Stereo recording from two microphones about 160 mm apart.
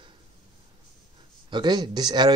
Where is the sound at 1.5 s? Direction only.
25° right (ahead or behind).